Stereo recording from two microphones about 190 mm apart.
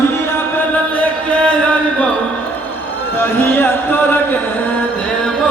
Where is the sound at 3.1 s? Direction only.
10° left (ahead or behind).